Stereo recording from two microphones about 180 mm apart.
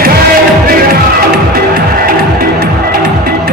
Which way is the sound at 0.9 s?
55° right (ahead or behind).